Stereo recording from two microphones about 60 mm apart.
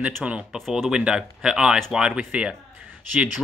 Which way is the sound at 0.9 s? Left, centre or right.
Centre.